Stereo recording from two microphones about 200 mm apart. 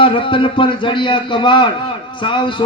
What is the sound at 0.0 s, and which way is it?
A man's voice, 25° left (ahead or behind).